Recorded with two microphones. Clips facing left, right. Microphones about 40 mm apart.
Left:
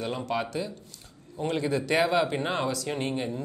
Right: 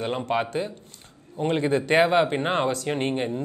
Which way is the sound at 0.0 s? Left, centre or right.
Right.